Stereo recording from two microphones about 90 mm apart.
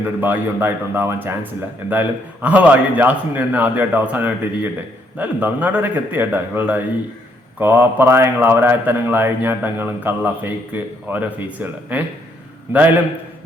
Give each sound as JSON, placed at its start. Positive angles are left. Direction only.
{"t": 0.0, "sound": "a man's voice", "side_deg": -20}